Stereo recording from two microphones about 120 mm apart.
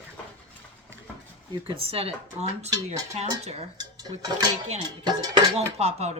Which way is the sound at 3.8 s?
35° right (ahead or behind).